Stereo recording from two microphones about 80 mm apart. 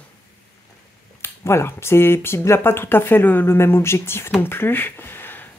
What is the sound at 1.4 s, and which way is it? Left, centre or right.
Speech, left.